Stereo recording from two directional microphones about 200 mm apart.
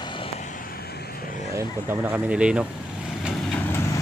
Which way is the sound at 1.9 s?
10° right (ahead or behind).